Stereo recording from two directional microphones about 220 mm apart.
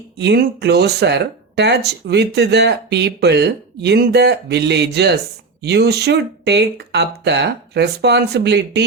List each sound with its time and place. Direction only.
0.2 s speech: 50° right (ahead or behind)